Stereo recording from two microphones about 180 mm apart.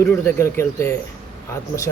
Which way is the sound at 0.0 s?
15° left (ahead or behind).